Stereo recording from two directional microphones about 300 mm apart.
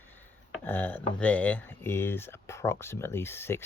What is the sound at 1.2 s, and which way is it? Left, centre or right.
Speech, centre.